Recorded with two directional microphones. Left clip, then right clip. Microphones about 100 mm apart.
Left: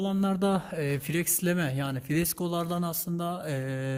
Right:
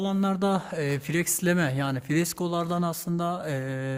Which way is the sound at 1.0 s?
20° right (ahead or behind).